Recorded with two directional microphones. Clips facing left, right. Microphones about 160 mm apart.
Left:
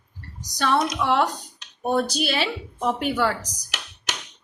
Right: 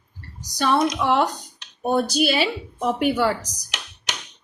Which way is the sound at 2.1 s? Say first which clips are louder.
Right 4 dB; 5° right (ahead or behind).